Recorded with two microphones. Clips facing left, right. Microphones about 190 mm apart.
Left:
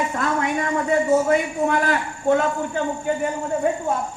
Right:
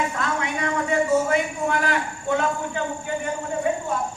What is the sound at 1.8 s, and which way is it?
Speech, 45° left (ahead or behind).